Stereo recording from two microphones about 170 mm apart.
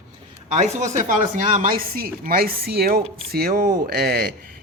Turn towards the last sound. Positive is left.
turn(degrees=-60)  # may be behind; listen again after turning